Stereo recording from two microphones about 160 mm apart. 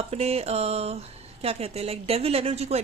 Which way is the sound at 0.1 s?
40° right (ahead or behind).